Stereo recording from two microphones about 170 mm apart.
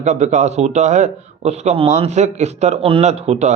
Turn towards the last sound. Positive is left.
turn(degrees=-40)  # may be behind; listen again after turning